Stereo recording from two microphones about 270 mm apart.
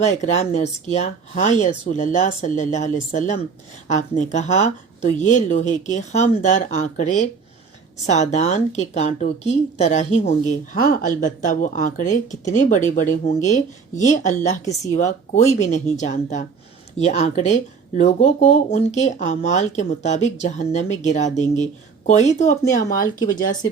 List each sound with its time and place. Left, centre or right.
0.0 s speech: left